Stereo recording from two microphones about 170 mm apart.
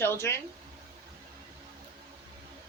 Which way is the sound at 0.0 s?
15° left (ahead or behind).